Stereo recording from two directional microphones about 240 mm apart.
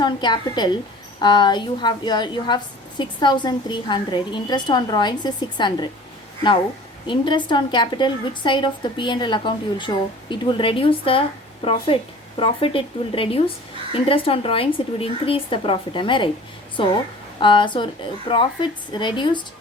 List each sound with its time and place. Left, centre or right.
0.0 s a woman's voice: centre
7.1 s a woman's voice: centre
18.9 s a woman's voice: centre